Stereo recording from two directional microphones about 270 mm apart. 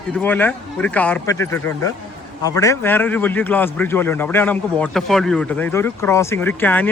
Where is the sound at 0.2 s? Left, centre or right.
Centre.